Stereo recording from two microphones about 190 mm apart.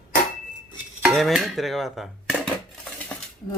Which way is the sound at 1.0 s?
Centre (ahead or behind).